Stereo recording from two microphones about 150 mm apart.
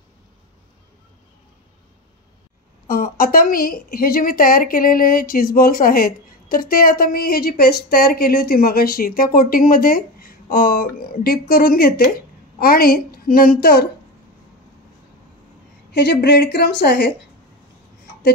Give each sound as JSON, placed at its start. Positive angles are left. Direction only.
{"t": 2.9, "sound": "a woman's voice", "side_deg": 75}
{"t": 15.9, "sound": "a woman's voice", "side_deg": 90}